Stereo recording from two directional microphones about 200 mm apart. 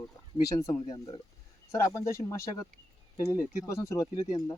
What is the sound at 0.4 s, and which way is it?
Speech, 15° left (ahead or behind).